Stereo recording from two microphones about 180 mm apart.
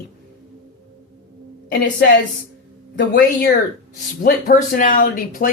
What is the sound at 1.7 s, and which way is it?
Speech, 70° left (ahead or behind).